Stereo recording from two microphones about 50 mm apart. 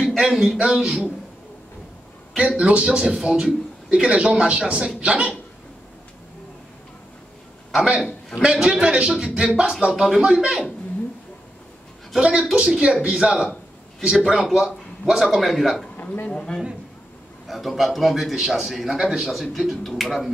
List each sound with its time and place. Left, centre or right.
0.0 s a sound: centre
0.6 s speech: centre
2.3 s a man's voice: right
8.4 s a man's voice: centre
12.2 s speech: centre
14.2 s a man's voice: centre
16.3 s a man's voice: centre
17.5 s a man's voice: centre
19.4 s a man's voice: centre